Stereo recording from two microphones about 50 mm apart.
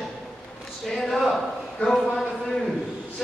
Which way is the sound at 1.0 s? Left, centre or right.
Centre.